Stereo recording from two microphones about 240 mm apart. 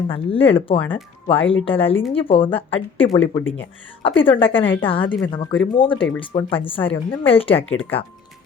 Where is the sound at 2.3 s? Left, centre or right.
Left.